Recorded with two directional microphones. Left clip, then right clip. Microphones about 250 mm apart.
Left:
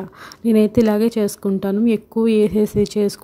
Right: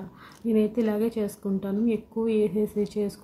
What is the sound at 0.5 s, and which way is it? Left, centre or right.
Speech, left.